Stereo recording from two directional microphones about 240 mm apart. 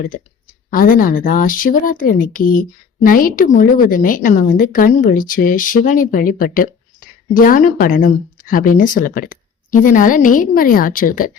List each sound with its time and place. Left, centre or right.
0.7 s speech: left